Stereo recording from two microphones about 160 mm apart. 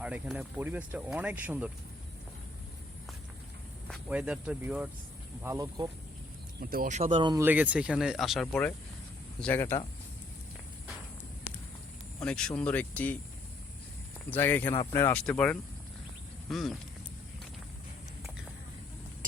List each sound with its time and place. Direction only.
0.0 s speech: 10° right (ahead or behind)
4.1 s speech: 5° right (ahead or behind); by 5.9 s 25° right (ahead or behind)
6.6 s speech: 70° right (ahead or behind)
6.8 s speech: 50° right (ahead or behind)
7.3 s speech: 10° right (ahead or behind); by 9.8 s 15° left (ahead or behind)
12.2 s speech: 5° left (ahead or behind)
14.3 s speech: 10° left (ahead or behind)